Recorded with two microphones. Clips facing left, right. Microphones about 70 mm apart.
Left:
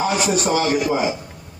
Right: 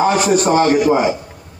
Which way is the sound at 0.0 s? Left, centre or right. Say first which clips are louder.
Right 6 dB; right.